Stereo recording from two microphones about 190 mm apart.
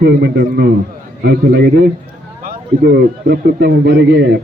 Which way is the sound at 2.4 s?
50° right (ahead or behind).